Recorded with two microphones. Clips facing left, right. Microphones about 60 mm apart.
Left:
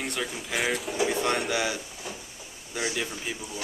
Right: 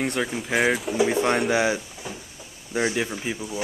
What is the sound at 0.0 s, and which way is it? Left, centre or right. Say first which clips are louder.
Speech: right 6 dB; centre.